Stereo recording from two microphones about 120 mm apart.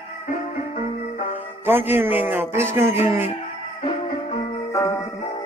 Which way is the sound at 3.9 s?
55° left (ahead or behind).